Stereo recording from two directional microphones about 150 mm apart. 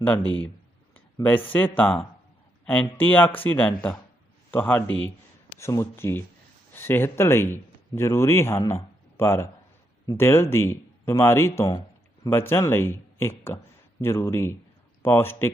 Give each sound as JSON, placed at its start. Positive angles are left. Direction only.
{"t": 0.9, "sound": "speech", "side_deg": 10}